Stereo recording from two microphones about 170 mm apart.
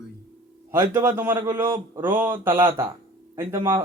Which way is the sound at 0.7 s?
15° right (ahead or behind).